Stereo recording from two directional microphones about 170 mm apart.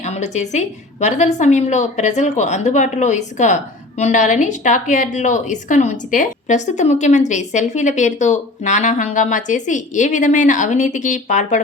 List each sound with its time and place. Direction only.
0.0 s a woman's voice: 40° left (ahead or behind)